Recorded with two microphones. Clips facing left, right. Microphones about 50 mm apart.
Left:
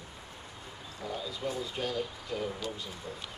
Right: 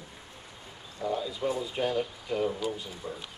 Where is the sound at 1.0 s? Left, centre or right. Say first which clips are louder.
Right 6 dB; centre.